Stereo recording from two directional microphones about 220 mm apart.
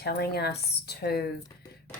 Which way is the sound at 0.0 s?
50° left (ahead or behind).